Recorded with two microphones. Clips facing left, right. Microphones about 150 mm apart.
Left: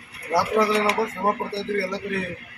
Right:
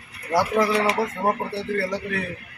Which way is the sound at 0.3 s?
Centre (ahead or behind).